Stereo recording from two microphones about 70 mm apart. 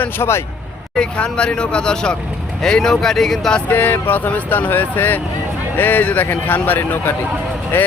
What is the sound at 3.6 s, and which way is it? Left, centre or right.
Speech, left.